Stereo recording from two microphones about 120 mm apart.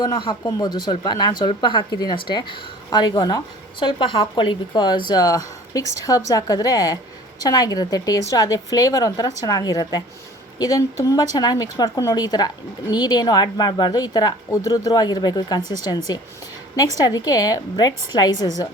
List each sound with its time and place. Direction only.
0.0 s speech: 45° left (ahead or behind)